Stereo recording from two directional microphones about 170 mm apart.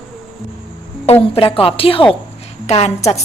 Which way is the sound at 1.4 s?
35° left (ahead or behind).